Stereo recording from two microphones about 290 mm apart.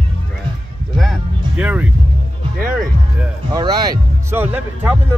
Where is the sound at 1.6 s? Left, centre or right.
Centre.